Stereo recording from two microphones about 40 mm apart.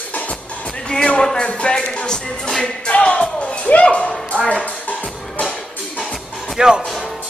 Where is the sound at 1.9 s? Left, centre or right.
Centre.